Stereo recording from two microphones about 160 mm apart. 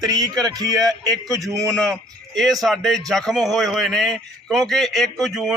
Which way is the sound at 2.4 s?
Centre (ahead or behind).